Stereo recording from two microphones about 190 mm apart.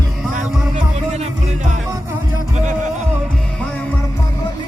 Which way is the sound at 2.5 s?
40° right (ahead or behind).